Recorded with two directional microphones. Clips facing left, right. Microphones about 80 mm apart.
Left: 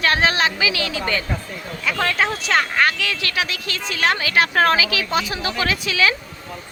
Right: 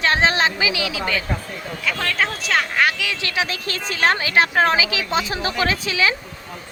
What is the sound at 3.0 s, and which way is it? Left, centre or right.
Speech, centre.